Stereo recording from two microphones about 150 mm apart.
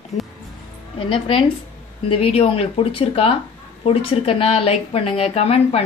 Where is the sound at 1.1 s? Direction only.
35° left (ahead or behind).